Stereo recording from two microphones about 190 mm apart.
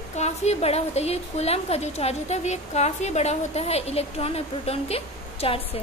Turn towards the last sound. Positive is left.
turn(degrees=30)  # may be behind; listen again after turning